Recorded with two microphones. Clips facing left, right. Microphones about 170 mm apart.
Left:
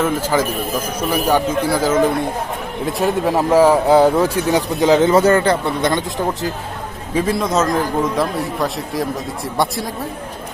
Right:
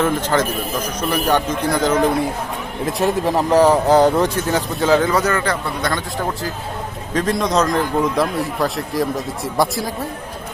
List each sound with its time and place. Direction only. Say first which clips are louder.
0.0 s a man's voice: even; 10° left (ahead or behind)
4.4 s speech: left 3 dB; 15° left (ahead or behind)
7.1 s a man's voice: left 1 dB; 5° left (ahead or behind)